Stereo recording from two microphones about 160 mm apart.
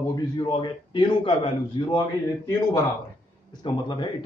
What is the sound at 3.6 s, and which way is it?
Speech, 30° left (ahead or behind).